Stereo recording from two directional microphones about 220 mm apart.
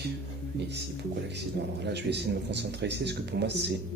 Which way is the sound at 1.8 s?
50° right (ahead or behind).